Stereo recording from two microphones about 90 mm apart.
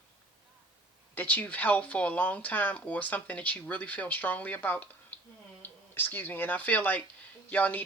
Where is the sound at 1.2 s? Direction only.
20° left (ahead or behind).